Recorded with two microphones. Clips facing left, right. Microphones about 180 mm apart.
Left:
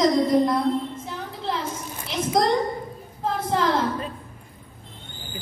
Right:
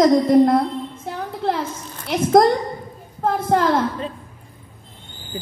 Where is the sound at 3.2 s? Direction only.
55° right (ahead or behind).